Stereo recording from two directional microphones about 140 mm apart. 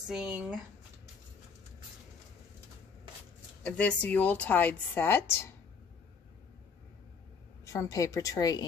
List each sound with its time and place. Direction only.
0.0 s speech: 5° right (ahead or behind)
3.6 s a woman's voice: 10° left (ahead or behind)
7.6 s a woman's voice: 25° left (ahead or behind)